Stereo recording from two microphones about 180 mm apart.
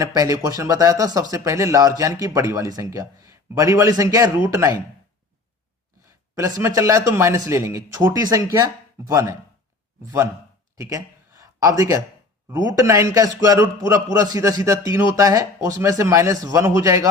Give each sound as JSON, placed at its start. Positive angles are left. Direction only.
{"t": 0.0, "sound": "speech", "side_deg": -20}
{"t": 6.3, "sound": "speech", "side_deg": -15}
{"t": 10.8, "sound": "a sound", "side_deg": -15}
{"t": 12.5, "sound": "speech", "side_deg": -20}